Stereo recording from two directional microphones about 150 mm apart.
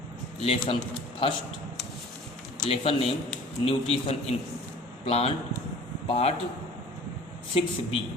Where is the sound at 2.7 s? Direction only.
40° left (ahead or behind).